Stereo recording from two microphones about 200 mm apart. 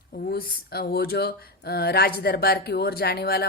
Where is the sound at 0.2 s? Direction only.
50° left (ahead or behind).